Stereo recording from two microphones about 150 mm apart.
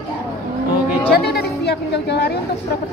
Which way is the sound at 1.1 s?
90° left.